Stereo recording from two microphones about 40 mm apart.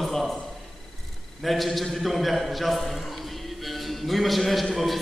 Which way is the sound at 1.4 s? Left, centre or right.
Centre.